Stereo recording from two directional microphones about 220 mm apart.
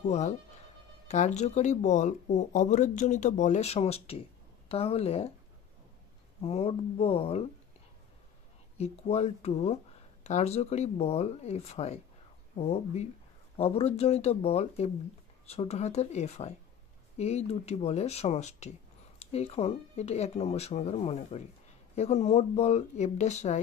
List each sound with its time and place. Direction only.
0.0 s speech: 30° left (ahead or behind)
6.4 s speech: 25° left (ahead or behind)
8.7 s speech: 30° left (ahead or behind)